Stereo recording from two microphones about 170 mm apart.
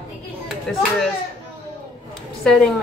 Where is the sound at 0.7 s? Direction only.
5° left (ahead or behind).